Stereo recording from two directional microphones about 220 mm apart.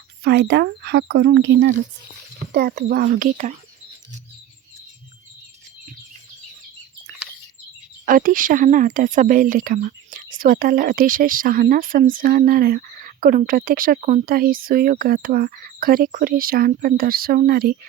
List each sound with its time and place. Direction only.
0.3 s speech: 50° right (ahead or behind)
8.0 s speech: 40° right (ahead or behind)